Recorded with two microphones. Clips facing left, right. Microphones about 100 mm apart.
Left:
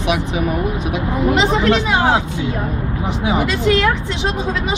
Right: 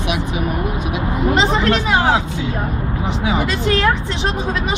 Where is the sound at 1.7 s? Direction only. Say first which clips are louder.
Even; 20° left (ahead or behind).